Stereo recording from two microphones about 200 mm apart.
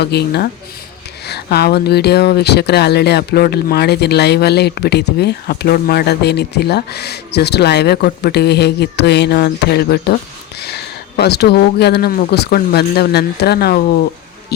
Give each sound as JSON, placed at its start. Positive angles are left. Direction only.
{"t": 0.0, "sound": "speech", "side_deg": 55}